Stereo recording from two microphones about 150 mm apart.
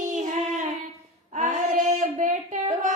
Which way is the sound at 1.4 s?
60° right (ahead or behind).